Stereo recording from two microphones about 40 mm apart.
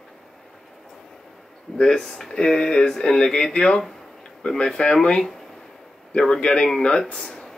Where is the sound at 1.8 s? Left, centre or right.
Centre.